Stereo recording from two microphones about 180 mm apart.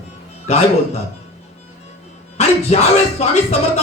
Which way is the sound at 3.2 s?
35° left (ahead or behind).